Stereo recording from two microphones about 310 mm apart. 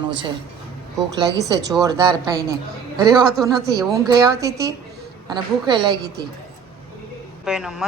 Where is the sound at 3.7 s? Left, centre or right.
Centre.